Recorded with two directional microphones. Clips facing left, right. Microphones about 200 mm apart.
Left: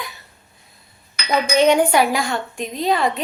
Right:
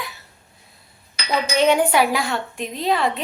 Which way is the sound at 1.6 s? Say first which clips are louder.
Left 2 dB; 5° right (ahead or behind).